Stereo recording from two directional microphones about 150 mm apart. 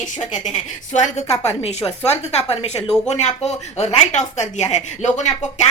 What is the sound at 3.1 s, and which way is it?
Speech, 50° left (ahead or behind).